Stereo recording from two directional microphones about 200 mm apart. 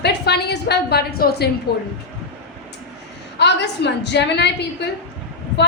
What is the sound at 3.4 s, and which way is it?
A woman's voice, 60° left (ahead or behind).